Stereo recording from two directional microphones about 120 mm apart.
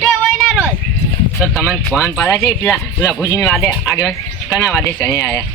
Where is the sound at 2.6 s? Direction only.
25° left (ahead or behind).